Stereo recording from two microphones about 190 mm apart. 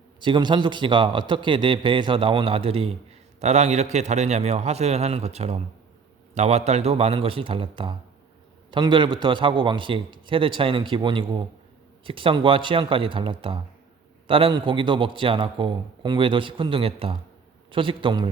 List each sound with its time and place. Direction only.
0.2 s a man's voice: 25° right (ahead or behind)